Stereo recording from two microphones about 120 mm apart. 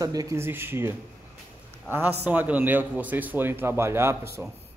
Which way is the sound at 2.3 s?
15° right (ahead or behind).